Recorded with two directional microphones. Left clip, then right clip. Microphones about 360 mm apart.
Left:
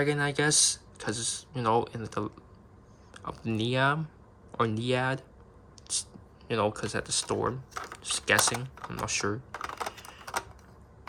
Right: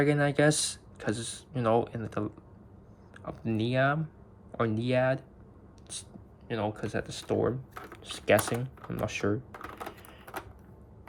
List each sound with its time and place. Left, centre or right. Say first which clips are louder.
0.0 s speech: right 2 dB; centre
7.7 s a sound: left 5 dB; left
7.9 s speech: right 1 dB; centre
8.5 s speech: left 1 dB; left
8.9 s speech: even; centre
9.5 s typing: left 5 dB; left